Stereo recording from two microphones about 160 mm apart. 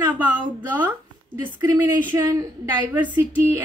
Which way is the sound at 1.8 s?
15° right (ahead or behind).